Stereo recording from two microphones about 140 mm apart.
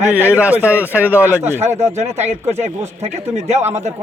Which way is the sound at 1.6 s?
50° right (ahead or behind).